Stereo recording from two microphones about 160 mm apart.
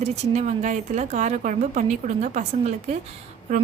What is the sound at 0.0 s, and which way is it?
A woman's voice, 45° right (ahead or behind).